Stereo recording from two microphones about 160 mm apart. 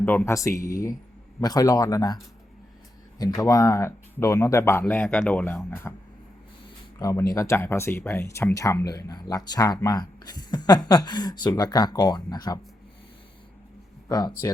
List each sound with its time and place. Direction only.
0.0 s speech: 10° left (ahead or behind)
3.2 s speech: 20° left (ahead or behind)
7.0 s speech: 20° left (ahead or behind)
14.1 s speech: 25° left (ahead or behind)